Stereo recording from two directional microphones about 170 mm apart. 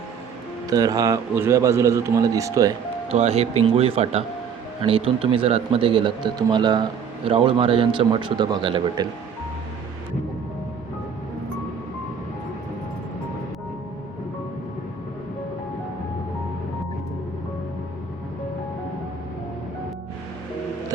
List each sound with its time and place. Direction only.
0.7 s speech: 20° right (ahead or behind)
3.1 s speech: 35° right (ahead or behind)